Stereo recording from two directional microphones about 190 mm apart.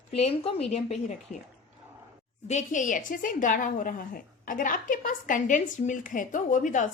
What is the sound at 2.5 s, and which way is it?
A woman's voice, 40° left (ahead or behind).